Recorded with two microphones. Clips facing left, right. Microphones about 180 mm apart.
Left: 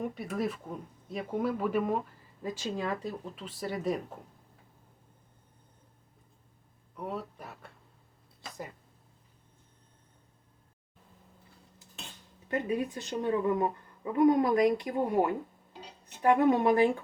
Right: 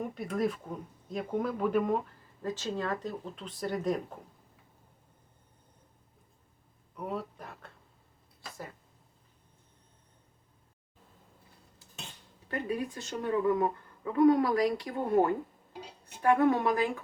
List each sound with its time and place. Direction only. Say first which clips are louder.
0.0 s speech: right 1 dB; centre (ahead or behind)
6.9 s speech: right 1 dB; centre (ahead or behind)
8.4 s a sound: left 2 dB; 20° left (ahead or behind)
12.5 s a woman's voice: left 3 dB; 20° left (ahead or behind)